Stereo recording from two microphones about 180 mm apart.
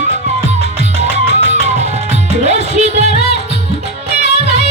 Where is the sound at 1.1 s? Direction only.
70° left (ahead or behind).